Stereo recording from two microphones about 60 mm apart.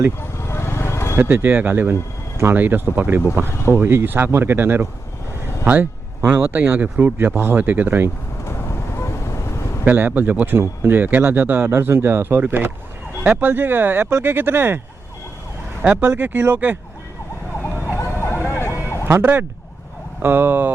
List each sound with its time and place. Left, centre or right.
0.2 s vehicle: left
1.1 s speech: right
8.4 s vehicle: left
9.8 s speech: right
15.8 s speech: right
17.8 s vehicle: left
19.2 s speech: right